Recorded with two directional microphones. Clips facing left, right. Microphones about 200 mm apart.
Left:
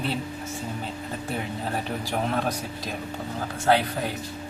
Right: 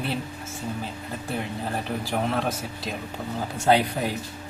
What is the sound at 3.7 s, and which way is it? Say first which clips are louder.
Speech: right 1 dB; 15° right (ahead or behind).